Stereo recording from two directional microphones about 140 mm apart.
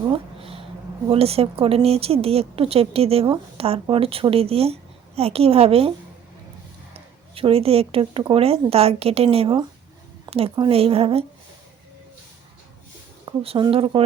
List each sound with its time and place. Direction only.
0.1 s a sound: 40° right (ahead or behind)
1.1 s a woman's voice: 45° right (ahead or behind)
6.9 s a woman's voice: 45° right (ahead or behind)
13.2 s speech: 45° right (ahead or behind)